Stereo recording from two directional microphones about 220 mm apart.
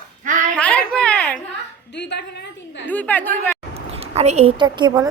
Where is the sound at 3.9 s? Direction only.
30° right (ahead or behind).